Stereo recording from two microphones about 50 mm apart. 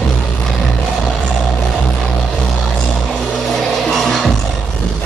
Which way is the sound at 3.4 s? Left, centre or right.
Centre.